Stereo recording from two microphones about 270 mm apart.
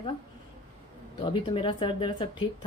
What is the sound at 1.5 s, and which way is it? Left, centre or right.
A woman's voice, centre.